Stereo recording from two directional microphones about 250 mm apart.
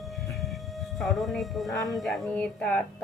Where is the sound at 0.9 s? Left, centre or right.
Centre.